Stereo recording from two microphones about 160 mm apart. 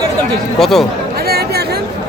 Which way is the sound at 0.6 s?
Centre (ahead or behind).